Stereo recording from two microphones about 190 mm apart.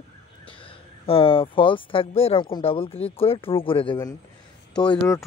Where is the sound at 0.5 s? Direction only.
30° left (ahead or behind).